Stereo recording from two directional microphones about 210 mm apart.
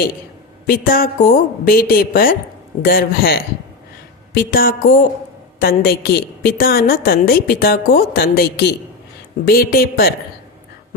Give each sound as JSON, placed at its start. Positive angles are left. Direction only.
{"t": 0.7, "sound": "a woman's voice", "side_deg": 45}